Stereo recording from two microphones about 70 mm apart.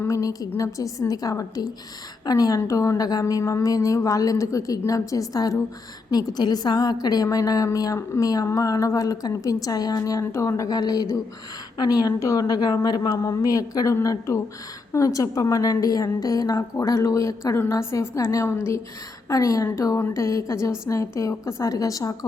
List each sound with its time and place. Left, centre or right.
0.1 s a woman's voice: left
6.1 s a woman's voice: left
10.8 s a woman's voice: left
11.8 s a woman's voice: left
12.2 s a woman's voice: left
13.3 s a woman's voice: left
16.7 s a woman's voice: left
20.1 s a woman's voice: left